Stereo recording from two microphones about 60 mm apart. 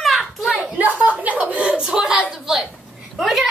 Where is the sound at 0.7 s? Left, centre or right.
Right.